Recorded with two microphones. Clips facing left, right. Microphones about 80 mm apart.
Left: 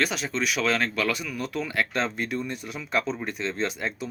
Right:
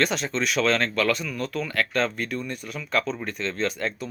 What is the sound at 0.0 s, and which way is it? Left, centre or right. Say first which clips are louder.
Speech: right 2 dB; centre.